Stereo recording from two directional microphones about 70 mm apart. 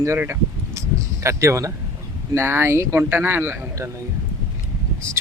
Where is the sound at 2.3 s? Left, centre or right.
Right.